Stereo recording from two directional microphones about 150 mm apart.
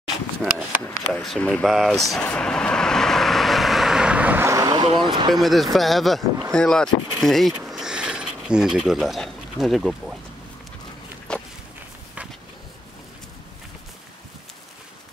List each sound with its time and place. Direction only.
0.4 s speech: 5° left (ahead or behind)
2.2 s vehicle: 5° left (ahead or behind); by 4.8 s 25° right (ahead or behind)
4.9 s speech: 30° right (ahead or behind)
5.3 s speech: centre (ahead or behind)
11.3 s walk: 5° left (ahead or behind)